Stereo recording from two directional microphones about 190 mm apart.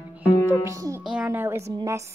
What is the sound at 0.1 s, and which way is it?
Music, 10° right (ahead or behind).